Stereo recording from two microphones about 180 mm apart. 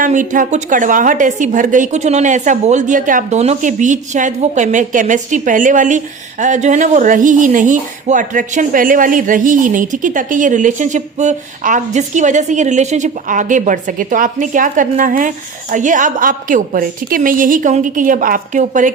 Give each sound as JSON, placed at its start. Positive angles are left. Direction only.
{"t": 0.0, "sound": "speech", "side_deg": -45}